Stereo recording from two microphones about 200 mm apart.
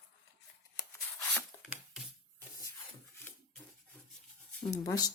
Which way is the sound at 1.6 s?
5° right (ahead or behind).